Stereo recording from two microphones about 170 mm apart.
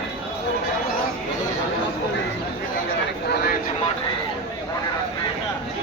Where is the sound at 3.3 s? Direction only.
65° left (ahead or behind).